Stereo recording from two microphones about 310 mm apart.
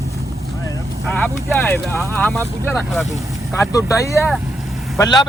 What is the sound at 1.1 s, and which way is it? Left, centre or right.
A man's voice, centre.